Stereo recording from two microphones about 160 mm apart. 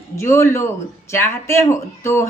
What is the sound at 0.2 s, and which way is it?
Speech, 15° left (ahead or behind).